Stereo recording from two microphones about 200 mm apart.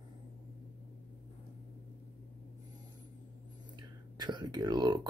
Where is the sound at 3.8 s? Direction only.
20° right (ahead or behind).